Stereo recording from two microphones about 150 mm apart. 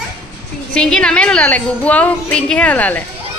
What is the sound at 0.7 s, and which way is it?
A woman's voice, 5° left (ahead or behind).